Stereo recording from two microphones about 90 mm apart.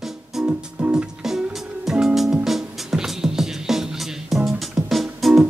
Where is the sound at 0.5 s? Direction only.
15° right (ahead or behind).